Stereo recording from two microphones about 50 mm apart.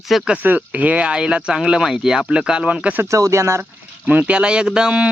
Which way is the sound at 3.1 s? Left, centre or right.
Right.